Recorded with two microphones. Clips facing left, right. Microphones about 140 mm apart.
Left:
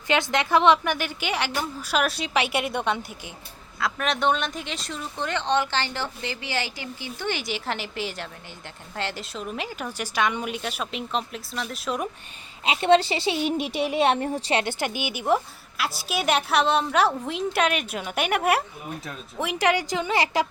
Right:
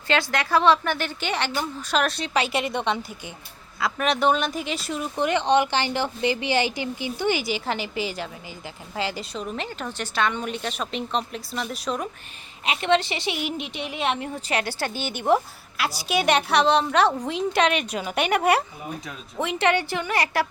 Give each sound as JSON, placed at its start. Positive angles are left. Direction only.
{"t": 0.1, "sound": "a woman's voice", "side_deg": 20}
{"t": 12.6, "sound": "a child's voice", "side_deg": 30}
{"t": 15.8, "sound": "speech", "side_deg": 0}